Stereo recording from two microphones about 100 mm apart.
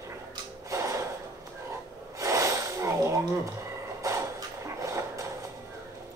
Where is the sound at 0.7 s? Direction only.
30° right (ahead or behind).